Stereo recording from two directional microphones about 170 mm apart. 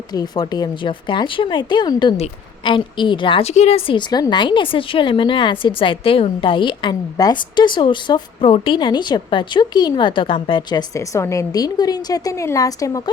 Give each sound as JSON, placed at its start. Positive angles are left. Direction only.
{"t": 0.1, "sound": "a woman's voice", "side_deg": 25}